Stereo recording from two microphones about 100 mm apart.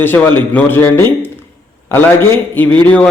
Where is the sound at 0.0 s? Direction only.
20° left (ahead or behind).